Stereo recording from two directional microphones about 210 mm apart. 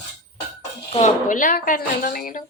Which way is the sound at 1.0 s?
40° left (ahead or behind).